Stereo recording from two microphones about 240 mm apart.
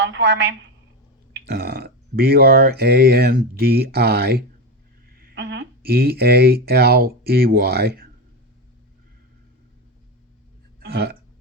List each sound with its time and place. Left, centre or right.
0.0 s a woman's voice: right
10.8 s burping: right